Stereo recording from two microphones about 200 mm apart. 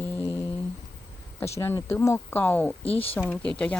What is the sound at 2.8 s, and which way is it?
Speech, 30° left (ahead or behind).